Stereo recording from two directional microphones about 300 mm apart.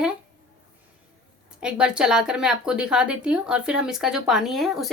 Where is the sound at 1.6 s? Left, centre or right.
Centre.